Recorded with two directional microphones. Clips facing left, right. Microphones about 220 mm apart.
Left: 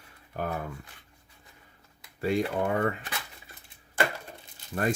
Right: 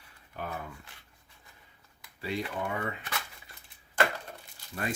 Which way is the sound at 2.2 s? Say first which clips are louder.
Left 7 dB; 45° left (ahead or behind).